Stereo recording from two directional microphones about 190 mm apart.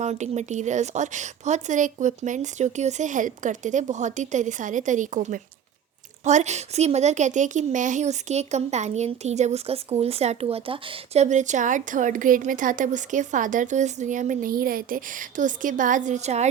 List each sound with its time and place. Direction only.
0.0 s a woman's voice: 35° right (ahead or behind)